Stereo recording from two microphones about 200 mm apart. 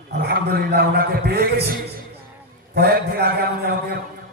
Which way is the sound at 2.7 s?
50° right (ahead or behind).